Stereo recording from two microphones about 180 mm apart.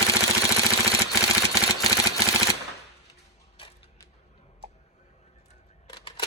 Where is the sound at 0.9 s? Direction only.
20° left (ahead or behind).